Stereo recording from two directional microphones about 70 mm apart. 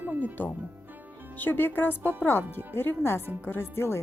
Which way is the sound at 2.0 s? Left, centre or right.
Right.